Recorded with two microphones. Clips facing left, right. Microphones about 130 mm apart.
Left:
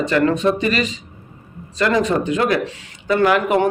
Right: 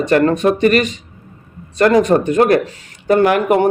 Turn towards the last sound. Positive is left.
turn(degrees=-50)  # may be behind; listen again after turning